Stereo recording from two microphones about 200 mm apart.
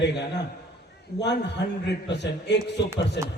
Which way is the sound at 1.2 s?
60° left (ahead or behind).